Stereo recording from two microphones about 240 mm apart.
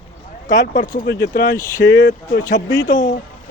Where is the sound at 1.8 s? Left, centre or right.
Left.